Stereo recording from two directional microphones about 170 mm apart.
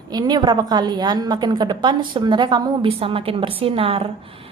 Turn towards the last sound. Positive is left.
turn(degrees=-35)  # may be behind; listen again after turning